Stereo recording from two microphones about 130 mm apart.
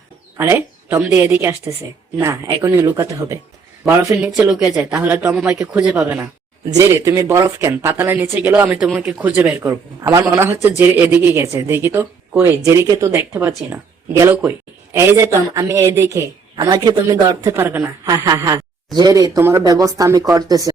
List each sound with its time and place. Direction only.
0.3 s a man's voice: 20° right (ahead or behind)
4.2 s speech: 5° right (ahead or behind)
6.7 s a man's voice: 25° right (ahead or behind)
9.6 s a man's voice: 25° right (ahead or behind)
14.9 s a man's voice: 20° right (ahead or behind)
16.6 s a man's voice: 30° right (ahead or behind)
18.0 s a man's voice: 30° right (ahead or behind)